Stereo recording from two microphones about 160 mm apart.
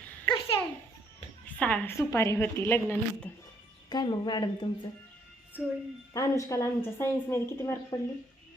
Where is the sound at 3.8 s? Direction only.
25° left (ahead or behind).